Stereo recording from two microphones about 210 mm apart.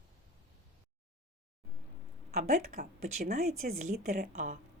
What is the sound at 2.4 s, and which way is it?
A woman's voice, 35° right (ahead or behind).